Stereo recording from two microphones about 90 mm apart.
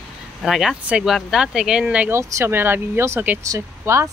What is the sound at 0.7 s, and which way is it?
Speech, 15° right (ahead or behind).